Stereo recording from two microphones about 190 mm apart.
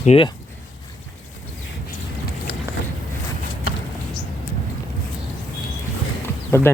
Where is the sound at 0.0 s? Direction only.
35° left (ahead or behind).